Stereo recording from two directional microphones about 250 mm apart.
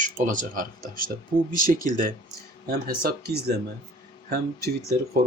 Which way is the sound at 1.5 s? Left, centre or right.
Right.